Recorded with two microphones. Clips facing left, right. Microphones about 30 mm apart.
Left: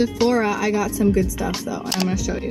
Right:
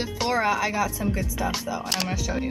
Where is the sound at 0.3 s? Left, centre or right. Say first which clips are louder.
Left 4 dB; centre.